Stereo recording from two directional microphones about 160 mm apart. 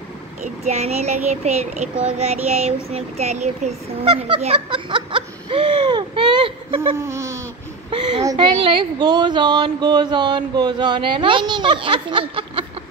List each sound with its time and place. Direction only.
0.7 s a child's voice: 40° right (ahead or behind)
7.0 s a sound: 15° right (ahead or behind)
8.2 s speech: 25° right (ahead or behind)